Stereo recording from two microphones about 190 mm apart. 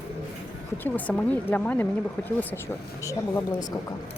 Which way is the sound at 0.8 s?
10° left (ahead or behind).